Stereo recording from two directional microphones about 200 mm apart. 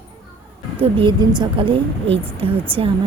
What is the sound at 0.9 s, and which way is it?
Speech, 25° right (ahead or behind).